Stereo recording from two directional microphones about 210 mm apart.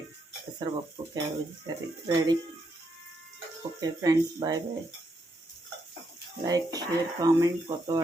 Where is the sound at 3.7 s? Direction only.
15° right (ahead or behind).